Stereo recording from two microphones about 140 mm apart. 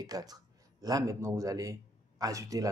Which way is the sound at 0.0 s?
25° right (ahead or behind).